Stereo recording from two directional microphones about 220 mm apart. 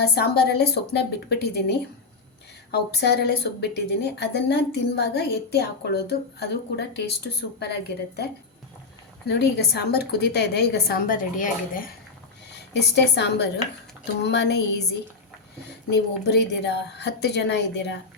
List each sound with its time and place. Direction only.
0.0 s speech: 45° left (ahead or behind)
9.2 s speech: 50° left (ahead or behind)
12.5 s a woman's voice: 50° left (ahead or behind)